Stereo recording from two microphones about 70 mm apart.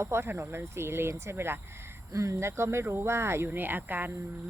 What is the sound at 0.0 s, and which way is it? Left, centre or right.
Speech, right.